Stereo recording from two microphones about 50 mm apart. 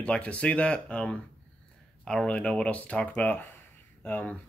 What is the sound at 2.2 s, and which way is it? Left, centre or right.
Speech, left.